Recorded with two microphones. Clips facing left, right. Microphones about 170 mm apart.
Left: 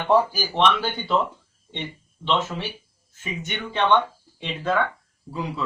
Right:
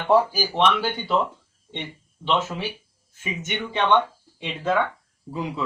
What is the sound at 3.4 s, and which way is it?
Speech, 20° right (ahead or behind).